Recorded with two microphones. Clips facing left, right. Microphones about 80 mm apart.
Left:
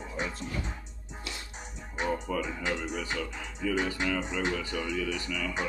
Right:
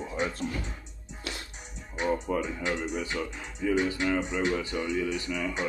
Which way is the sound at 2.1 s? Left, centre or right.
Centre.